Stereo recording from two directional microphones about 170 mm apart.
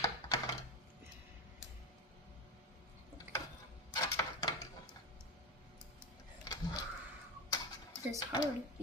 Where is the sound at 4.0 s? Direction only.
20° left (ahead or behind).